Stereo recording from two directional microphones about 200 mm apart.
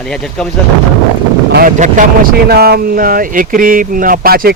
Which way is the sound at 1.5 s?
40° right (ahead or behind).